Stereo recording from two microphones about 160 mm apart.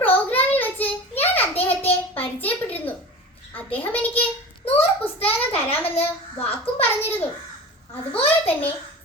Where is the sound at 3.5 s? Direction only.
10° left (ahead or behind).